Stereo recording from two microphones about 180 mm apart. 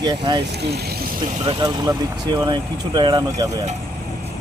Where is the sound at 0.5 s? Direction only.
65° right (ahead or behind).